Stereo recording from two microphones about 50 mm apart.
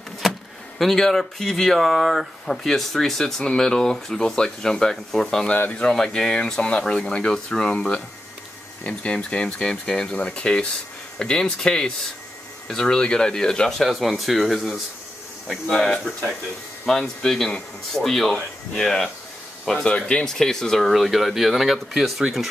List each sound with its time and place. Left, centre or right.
0.2 s a sound: centre
0.7 s speech: centre
5.7 s speech: left
8.8 s speech: left
20.9 s speech: centre